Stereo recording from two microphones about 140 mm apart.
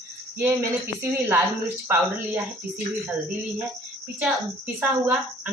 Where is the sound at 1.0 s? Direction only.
15° right (ahead or behind).